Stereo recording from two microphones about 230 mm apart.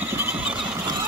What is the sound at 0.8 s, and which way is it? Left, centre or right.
Vehicle, centre.